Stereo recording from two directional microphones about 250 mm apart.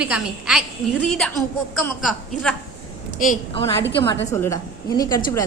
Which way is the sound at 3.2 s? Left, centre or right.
Left.